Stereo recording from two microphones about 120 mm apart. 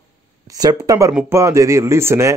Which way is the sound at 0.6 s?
30° right (ahead or behind).